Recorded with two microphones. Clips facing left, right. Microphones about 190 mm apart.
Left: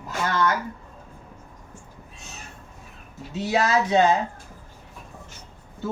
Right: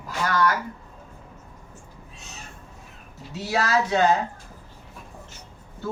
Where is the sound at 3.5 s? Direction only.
20° left (ahead or behind).